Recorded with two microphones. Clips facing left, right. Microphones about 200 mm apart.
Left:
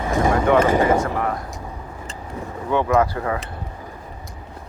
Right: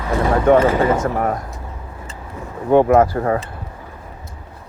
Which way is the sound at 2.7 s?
45° right (ahead or behind).